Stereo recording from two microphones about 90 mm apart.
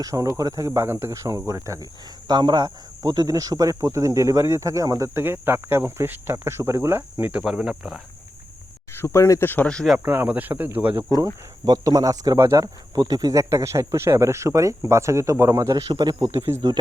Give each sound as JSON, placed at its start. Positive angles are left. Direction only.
{"t": 0.0, "sound": "speech", "side_deg": -40}
{"t": 2.2, "sound": "speech", "side_deg": -55}
{"t": 7.5, "sound": "speech", "side_deg": -5}
{"t": 8.9, "sound": "speech", "side_deg": 30}
{"t": 10.0, "sound": "speech", "side_deg": -25}
{"t": 11.6, "sound": "speech", "side_deg": -45}